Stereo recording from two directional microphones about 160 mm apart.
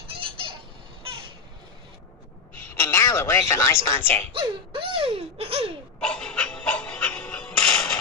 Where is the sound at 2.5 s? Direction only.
15° left (ahead or behind).